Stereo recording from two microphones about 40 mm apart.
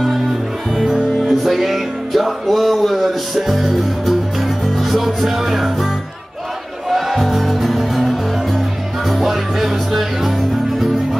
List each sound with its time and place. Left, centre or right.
0.8 s music: centre
1.3 s music: centre
6.9 s music: centre